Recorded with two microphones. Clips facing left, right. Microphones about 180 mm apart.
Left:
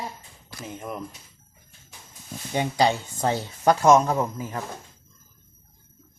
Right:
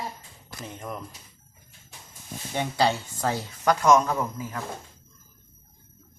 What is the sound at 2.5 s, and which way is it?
Speech, 15° left (ahead or behind).